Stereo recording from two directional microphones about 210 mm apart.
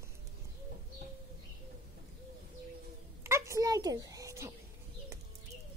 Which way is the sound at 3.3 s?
15° right (ahead or behind).